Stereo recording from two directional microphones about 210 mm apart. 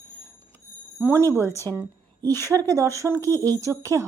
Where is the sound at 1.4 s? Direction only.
15° left (ahead or behind).